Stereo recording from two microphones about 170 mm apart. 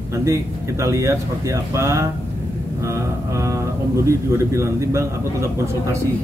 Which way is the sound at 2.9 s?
15° right (ahead or behind).